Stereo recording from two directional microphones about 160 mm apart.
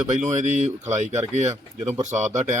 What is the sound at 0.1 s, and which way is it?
Speech, 50° right (ahead or behind).